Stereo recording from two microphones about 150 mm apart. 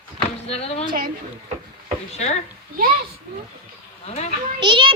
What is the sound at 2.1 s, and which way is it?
Speech, 45° left (ahead or behind).